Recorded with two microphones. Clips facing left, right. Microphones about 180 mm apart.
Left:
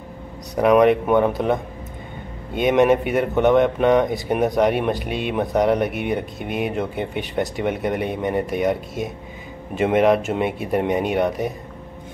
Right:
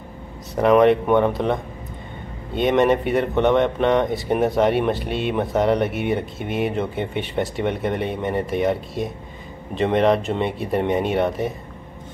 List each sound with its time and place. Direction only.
0.6 s speech: centre (ahead or behind)
2.6 s speech: 5° left (ahead or behind)